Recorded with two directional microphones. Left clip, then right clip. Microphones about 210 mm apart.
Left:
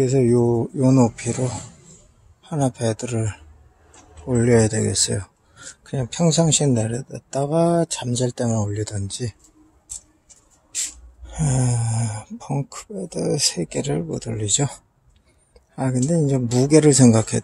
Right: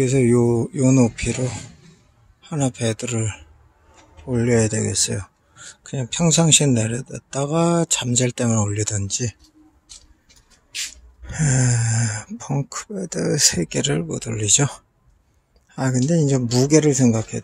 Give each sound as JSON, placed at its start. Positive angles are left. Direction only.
{"t": 0.0, "sound": "speech", "side_deg": -5}
{"t": 2.4, "sound": "speech", "side_deg": -5}
{"t": 11.2, "sound": "speech", "side_deg": -5}